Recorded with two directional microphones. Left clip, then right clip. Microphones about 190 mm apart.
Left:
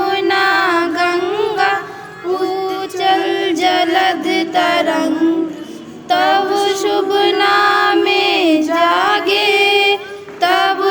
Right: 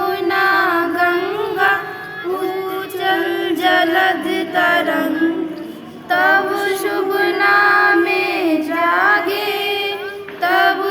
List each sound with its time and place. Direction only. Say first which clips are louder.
0.0 s music: left 2 dB; 30° left (ahead or behind)
3.0 s choir: left 4 dB; 30° left (ahead or behind)
4.8 s music: left 2 dB; 30° left (ahead or behind)
6.1 s female singing: left 1 dB; 30° left (ahead or behind)
6.7 s music: left 3 dB; 30° left (ahead or behind)